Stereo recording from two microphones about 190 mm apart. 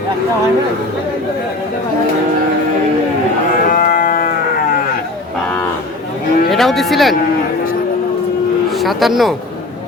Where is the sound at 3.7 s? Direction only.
45° left (ahead or behind).